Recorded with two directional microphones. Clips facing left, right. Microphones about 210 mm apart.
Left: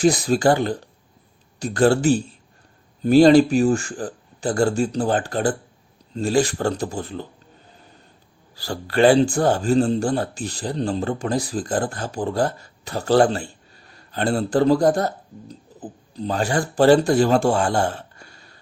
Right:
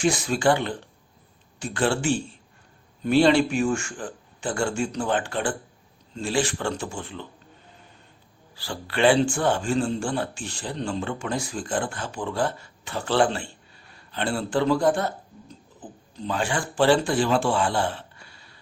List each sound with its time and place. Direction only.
0.0 s speech: 35° left (ahead or behind)
8.5 s speech: 40° left (ahead or behind)